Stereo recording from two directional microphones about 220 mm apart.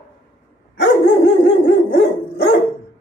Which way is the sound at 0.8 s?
55° left (ahead or behind).